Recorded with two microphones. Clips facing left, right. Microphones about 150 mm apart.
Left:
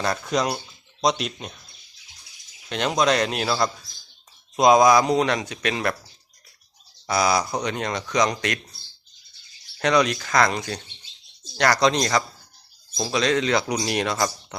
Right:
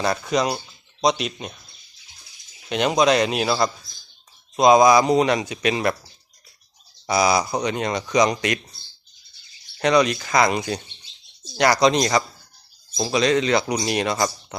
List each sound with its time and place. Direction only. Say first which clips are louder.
0.0 s speech: right 2 dB; 5° right (ahead or behind)
2.6 s speech: right 3 dB; 10° right (ahead or behind)
7.1 s speech: right 2 dB; 10° right (ahead or behind)
9.8 s speech: right 2 dB; centre (ahead or behind)